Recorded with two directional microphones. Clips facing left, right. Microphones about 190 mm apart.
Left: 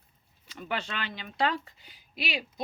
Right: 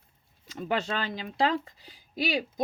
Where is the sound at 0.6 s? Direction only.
35° right (ahead or behind).